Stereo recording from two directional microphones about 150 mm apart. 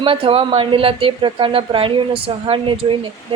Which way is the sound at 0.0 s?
35° right (ahead or behind).